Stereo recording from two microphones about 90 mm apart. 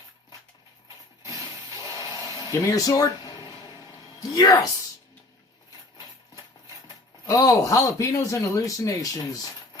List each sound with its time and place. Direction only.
2.0 s a sound: 45° left (ahead or behind)
4.2 s speech: 45° left (ahead or behind)
6.8 s speech: 40° left (ahead or behind)